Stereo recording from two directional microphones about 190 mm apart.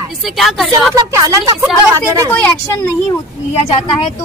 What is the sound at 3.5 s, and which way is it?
Speech, 30° left (ahead or behind).